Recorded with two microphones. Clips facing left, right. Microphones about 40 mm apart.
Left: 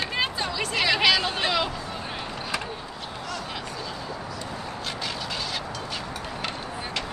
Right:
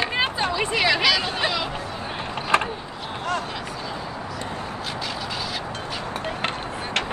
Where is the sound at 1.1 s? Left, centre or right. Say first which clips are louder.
Even; centre.